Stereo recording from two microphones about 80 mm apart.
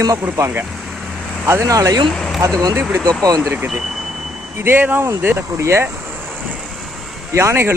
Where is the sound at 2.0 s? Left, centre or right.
Centre.